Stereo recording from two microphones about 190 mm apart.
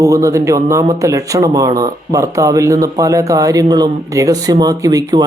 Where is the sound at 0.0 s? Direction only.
15° right (ahead or behind).